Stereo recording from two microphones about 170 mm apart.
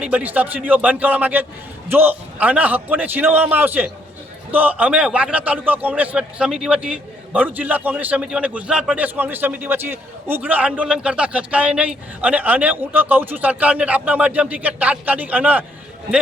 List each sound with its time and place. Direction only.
0.0 s a man's voice: 10° right (ahead or behind)